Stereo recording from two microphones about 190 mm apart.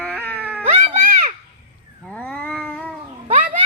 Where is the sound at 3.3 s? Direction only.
45° right (ahead or behind).